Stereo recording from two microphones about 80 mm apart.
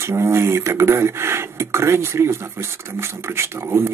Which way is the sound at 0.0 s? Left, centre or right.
Right.